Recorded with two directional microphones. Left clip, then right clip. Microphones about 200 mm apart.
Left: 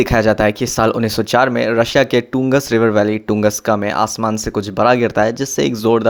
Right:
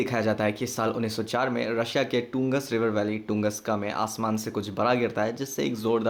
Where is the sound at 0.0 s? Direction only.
45° left (ahead or behind).